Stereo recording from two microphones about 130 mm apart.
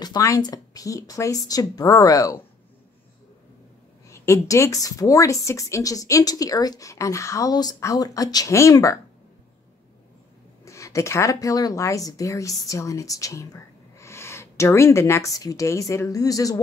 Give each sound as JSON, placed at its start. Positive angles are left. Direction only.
{"t": 0.0, "sound": "a woman's voice", "side_deg": 30}
{"t": 4.1, "sound": "a woman's voice", "side_deg": 25}
{"t": 10.6, "sound": "a woman's voice", "side_deg": 25}